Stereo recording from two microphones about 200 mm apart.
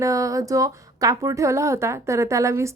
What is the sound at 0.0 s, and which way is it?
Speech, 15° right (ahead or behind).